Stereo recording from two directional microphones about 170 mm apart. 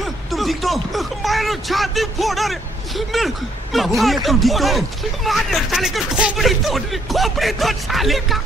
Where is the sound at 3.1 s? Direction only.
Centre (ahead or behind).